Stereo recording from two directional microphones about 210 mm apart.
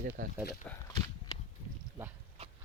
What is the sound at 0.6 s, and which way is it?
Speech, 10° left (ahead or behind).